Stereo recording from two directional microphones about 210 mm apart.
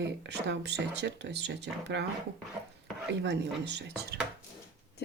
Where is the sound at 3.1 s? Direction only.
55° right (ahead or behind).